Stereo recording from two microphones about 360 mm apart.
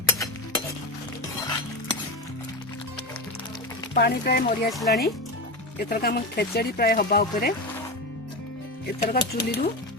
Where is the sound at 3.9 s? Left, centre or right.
Left.